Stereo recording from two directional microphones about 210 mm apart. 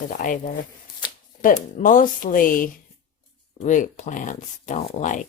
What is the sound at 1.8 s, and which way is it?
Speech, 40° left (ahead or behind).